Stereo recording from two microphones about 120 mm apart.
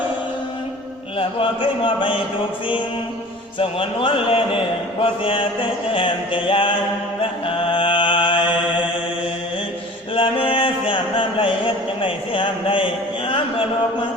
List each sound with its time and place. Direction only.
1.2 s a man's voice: 45° left (ahead or behind)
3.6 s a man's voice: 50° left (ahead or behind)
7.2 s chant: 45° left (ahead or behind)
10.2 s a sound: 45° left (ahead or behind)